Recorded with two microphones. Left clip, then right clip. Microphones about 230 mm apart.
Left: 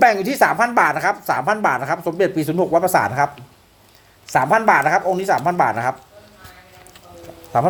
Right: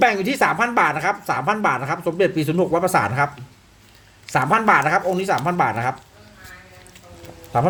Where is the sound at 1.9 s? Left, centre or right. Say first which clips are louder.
Left 1 dB; centre.